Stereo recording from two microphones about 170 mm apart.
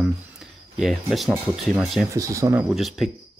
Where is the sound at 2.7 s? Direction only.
Centre (ahead or behind).